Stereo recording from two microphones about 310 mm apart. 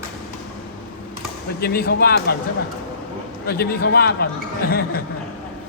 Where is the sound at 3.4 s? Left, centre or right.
Left.